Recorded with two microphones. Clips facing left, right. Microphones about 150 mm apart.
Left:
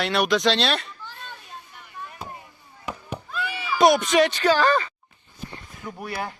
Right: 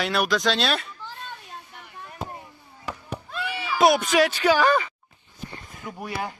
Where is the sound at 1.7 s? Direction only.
65° right (ahead or behind).